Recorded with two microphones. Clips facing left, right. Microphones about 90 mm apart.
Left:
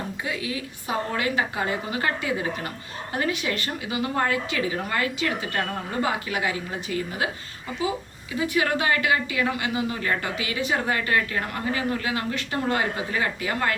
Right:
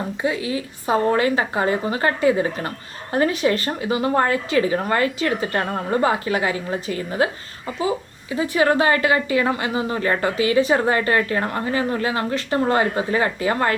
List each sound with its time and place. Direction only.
0.2 s a woman's voice: 30° right (ahead or behind)
8.3 s a woman's voice: 35° right (ahead or behind)